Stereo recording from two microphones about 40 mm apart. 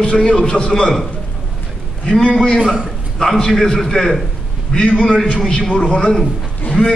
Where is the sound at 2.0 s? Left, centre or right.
Centre.